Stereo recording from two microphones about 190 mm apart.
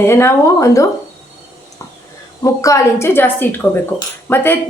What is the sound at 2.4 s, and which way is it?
A woman's voice, 15° left (ahead or behind).